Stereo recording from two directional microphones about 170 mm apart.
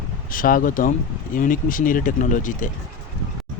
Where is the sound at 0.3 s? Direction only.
55° left (ahead or behind).